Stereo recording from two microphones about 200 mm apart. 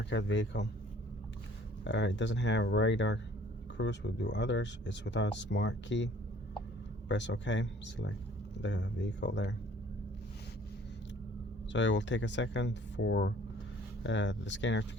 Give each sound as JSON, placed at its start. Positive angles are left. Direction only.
{"t": 0.0, "sound": "speech", "side_deg": 60}
{"t": 1.8, "sound": "speech", "side_deg": 65}
{"t": 7.1, "sound": "speech", "side_deg": 65}
{"t": 11.7, "sound": "speech", "side_deg": 65}